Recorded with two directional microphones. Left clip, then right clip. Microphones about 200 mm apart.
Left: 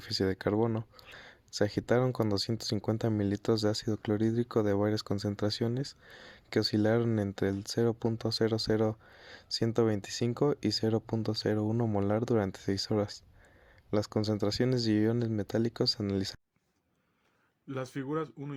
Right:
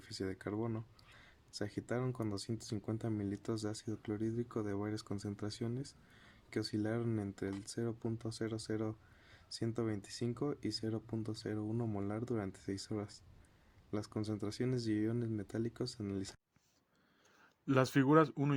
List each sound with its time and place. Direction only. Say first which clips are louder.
0.0 s speech: left 12 dB; 40° left (ahead or behind)
17.7 s speech: right 6 dB; 35° right (ahead or behind)